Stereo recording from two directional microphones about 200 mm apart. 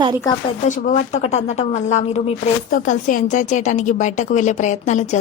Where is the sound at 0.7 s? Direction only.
40° left (ahead or behind).